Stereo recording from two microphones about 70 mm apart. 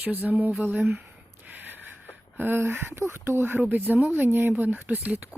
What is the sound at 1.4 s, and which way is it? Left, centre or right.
Gasp, right.